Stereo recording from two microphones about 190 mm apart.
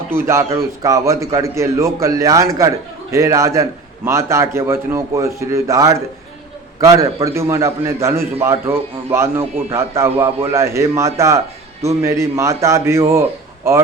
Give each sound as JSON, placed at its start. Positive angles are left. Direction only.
{"t": 0.1, "sound": "a man's voice", "side_deg": -15}